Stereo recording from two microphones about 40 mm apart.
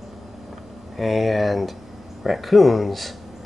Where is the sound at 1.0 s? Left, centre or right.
Centre.